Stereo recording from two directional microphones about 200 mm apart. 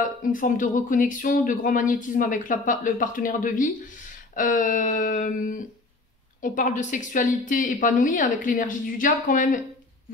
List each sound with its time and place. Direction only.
0.2 s speech: 40° left (ahead or behind)